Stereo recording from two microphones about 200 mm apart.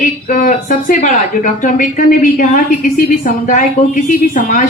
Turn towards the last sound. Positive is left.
turn(degrees=40)  # may be behind; listen again after turning